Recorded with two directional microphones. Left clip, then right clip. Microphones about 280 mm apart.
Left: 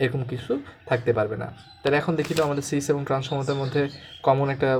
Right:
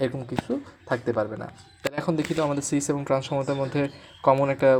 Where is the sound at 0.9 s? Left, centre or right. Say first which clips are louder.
Left 3 dB; centre.